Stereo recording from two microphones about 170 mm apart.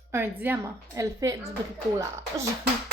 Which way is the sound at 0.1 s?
10° right (ahead or behind).